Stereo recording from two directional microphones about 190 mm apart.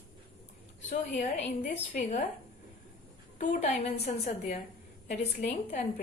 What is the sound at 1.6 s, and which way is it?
Speech, 45° left (ahead or behind).